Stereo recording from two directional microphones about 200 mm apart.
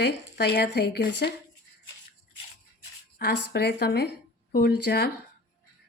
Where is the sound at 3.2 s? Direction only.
55° left (ahead or behind).